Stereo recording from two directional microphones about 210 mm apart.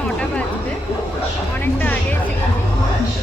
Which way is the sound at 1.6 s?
10° left (ahead or behind).